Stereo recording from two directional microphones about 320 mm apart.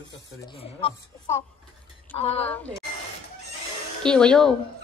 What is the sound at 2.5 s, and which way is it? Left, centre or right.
Speech, centre.